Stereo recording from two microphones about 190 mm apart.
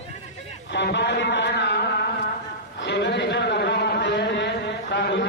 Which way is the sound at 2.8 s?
65° left (ahead or behind).